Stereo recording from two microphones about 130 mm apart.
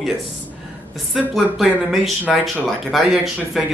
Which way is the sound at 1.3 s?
Centre (ahead or behind).